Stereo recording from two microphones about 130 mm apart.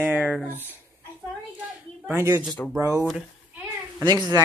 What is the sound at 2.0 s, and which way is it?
Speech, 20° right (ahead or behind).